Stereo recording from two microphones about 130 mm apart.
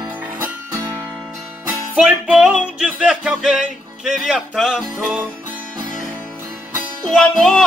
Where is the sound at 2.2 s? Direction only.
5° right (ahead or behind).